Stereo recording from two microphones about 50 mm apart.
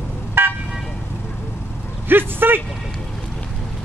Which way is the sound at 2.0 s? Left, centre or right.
Right.